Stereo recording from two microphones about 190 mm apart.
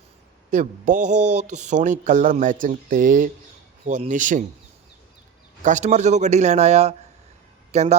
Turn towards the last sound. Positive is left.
turn(degrees=-35)  # may be behind; listen again after turning